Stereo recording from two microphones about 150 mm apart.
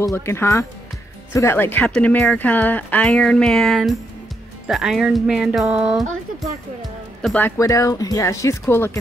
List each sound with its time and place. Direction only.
0.0 s speech: 15° left (ahead or behind); by 6.0 s 10° right (ahead or behind)
6.8 s music: centre (ahead or behind)
7.3 s speech: 15° left (ahead or behind)